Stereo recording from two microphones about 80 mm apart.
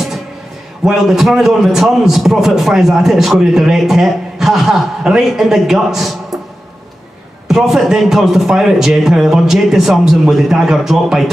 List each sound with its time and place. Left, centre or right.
0.8 s a man's voice: centre
7.4 s a man's voice: centre